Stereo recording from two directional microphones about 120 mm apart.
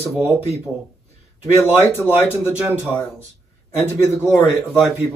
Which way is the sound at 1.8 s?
15° left (ahead or behind).